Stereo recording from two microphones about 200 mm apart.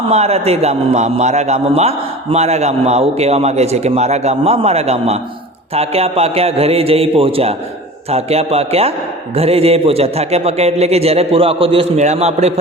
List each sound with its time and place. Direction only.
0.1 s a man's voice: 30° right (ahead or behind)